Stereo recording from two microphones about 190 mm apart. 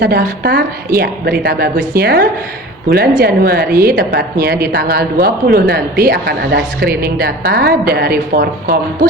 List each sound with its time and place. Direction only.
0.0 s a woman's voice: 55° right (ahead or behind)